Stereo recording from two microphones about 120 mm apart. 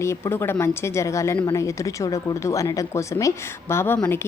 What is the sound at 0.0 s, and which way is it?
A woman's voice, 20° left (ahead or behind).